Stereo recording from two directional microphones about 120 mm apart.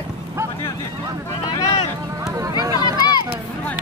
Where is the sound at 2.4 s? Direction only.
30° right (ahead or behind).